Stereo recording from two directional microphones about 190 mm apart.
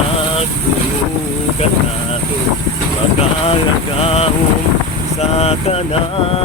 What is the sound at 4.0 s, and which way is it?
Speech, 30° left (ahead or behind).